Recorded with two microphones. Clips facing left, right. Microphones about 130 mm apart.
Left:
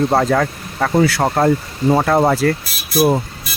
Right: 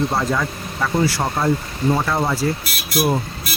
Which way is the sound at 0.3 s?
60° left (ahead or behind).